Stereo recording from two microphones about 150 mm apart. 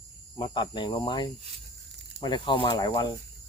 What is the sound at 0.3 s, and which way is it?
Speech, 30° left (ahead or behind).